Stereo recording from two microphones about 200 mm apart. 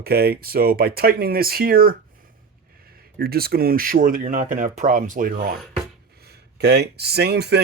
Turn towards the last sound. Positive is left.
turn(degrees=-55)  # may be behind; listen again after turning